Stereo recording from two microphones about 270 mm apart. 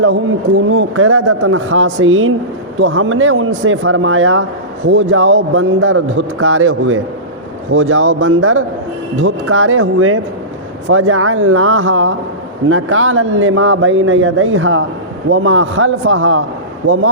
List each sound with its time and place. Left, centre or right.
0.7 s a man's voice: right